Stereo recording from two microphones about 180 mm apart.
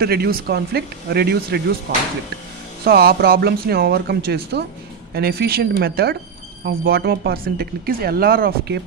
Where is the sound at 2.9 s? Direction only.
60° right (ahead or behind).